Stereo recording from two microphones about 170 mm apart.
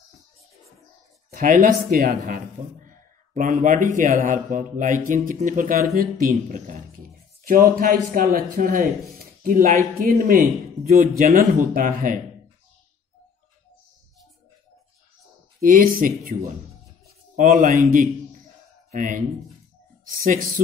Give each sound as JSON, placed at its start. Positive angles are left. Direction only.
{"t": 1.3, "sound": "speech", "side_deg": -55}
{"t": 5.9, "sound": "music", "side_deg": -60}
{"t": 7.8, "sound": "speech", "side_deg": -50}
{"t": 15.6, "sound": "speech", "side_deg": -55}